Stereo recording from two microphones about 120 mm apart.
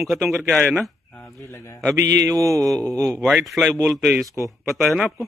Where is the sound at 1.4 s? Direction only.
25° left (ahead or behind).